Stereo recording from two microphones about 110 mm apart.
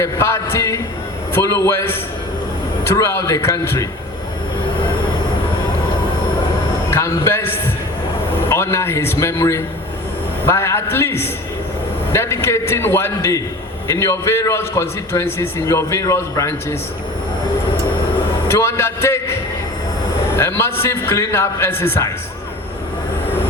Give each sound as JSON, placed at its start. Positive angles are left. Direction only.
{"t": 0.0, "sound": "a man's voice", "side_deg": 25}
{"t": 6.9, "sound": "a man's voice", "side_deg": 25}
{"t": 18.4, "sound": "a man's voice", "side_deg": 25}
{"t": 20.3, "sound": "a man's voice", "side_deg": 25}